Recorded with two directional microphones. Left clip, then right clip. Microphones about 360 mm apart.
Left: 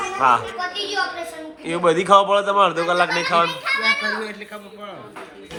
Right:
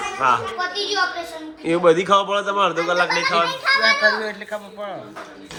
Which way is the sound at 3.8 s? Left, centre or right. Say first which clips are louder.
Right 3 dB; right.